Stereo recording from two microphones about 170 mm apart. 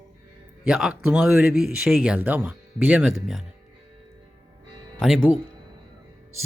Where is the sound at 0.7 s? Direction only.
5° right (ahead or behind).